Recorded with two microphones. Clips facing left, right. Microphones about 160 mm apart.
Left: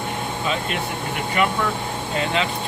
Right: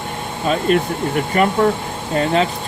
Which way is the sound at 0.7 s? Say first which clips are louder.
Right 9 dB; 45° right (ahead or behind).